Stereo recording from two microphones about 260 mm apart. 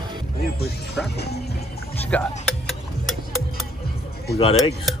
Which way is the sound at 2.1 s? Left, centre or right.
Centre.